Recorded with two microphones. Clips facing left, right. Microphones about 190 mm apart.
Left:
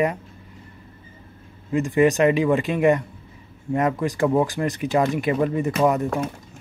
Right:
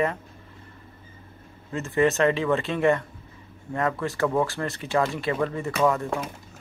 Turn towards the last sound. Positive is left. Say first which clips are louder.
# left 3 dB
turn(degrees=20)  # may be behind; listen again after turning